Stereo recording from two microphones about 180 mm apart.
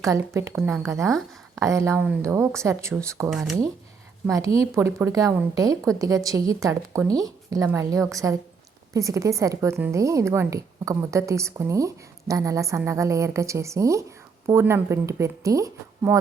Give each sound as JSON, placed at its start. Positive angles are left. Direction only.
{"t": 0.0, "sound": "a woman's voice", "side_deg": -15}
{"t": 3.2, "sound": "speech", "side_deg": 0}
{"t": 4.3, "sound": "a woman's voice", "side_deg": -20}